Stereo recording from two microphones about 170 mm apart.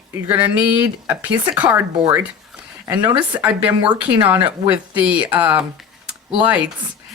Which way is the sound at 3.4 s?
10° right (ahead or behind).